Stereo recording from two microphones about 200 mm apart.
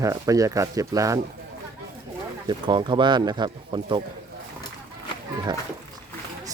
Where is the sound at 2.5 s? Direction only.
25° right (ahead or behind).